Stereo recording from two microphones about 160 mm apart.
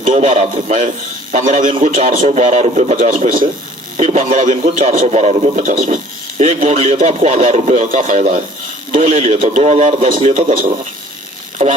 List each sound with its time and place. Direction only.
0.0 s a man's voice: 50° right (ahead or behind)